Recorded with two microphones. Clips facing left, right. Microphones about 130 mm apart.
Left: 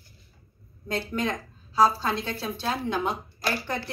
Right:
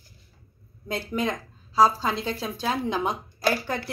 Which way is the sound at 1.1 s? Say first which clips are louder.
Right 1 dB; 10° right (ahead or behind).